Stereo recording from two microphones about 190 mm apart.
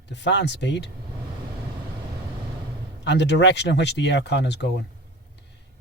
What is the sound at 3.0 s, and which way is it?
Speech, 65° left (ahead or behind).